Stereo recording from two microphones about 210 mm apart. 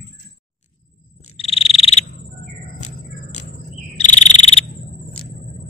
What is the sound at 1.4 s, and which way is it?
Frog, 30° left (ahead or behind).